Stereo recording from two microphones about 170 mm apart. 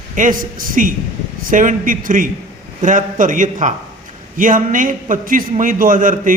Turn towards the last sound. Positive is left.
turn(degrees=-50)  # may be behind; listen again after turning